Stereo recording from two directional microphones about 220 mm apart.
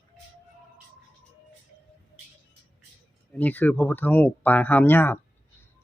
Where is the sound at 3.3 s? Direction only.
5° left (ahead or behind).